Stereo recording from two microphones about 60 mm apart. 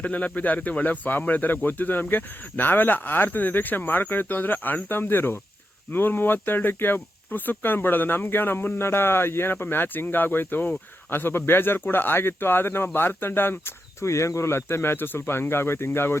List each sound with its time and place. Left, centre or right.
0.0 s speech: left
14.0 s speech: left